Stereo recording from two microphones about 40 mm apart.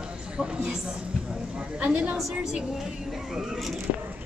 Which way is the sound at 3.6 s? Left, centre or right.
Centre.